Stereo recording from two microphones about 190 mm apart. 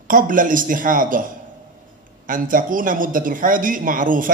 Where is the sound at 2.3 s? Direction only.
45° right (ahead or behind).